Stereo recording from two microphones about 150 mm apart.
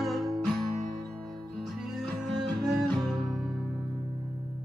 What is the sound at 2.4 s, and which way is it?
Music, centre (ahead or behind).